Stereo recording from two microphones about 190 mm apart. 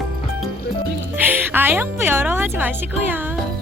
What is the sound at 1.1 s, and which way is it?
Speech, 10° right (ahead or behind).